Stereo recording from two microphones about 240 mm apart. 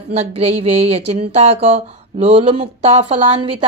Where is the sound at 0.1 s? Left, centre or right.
Right.